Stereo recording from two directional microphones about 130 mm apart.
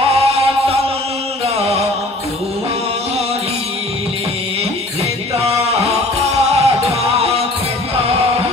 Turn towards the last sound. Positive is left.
turn(degrees=-50)  # may be behind; listen again after turning